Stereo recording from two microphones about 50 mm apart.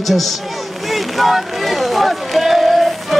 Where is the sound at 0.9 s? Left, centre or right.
Centre.